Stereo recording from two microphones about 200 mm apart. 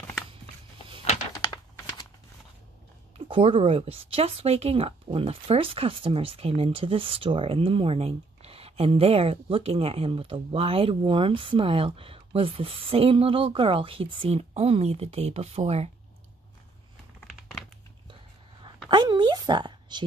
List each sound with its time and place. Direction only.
1.3 s a sound: 20° left (ahead or behind)
3.3 s speech: 25° right (ahead or behind)
18.9 s a woman's voice: 20° right (ahead or behind)